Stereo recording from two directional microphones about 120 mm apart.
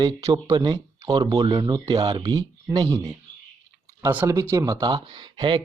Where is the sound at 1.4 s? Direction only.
50° right (ahead or behind).